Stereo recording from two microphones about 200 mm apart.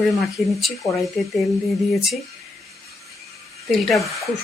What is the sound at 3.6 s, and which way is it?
Speech, centre (ahead or behind).